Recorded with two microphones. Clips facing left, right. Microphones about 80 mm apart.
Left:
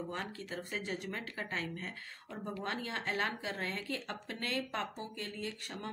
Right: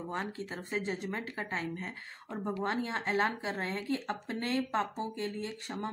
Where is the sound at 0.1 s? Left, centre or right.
Right.